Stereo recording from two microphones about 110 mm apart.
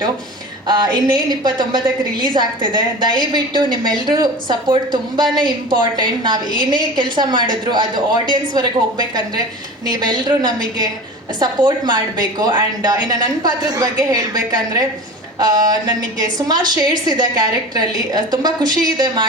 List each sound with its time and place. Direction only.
0.7 s a woman's voice: 40° right (ahead or behind)